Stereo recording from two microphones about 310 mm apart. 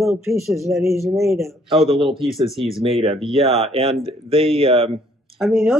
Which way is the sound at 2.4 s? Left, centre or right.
Centre.